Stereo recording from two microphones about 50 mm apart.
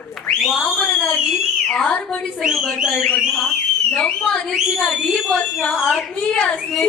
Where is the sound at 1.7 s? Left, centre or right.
Centre.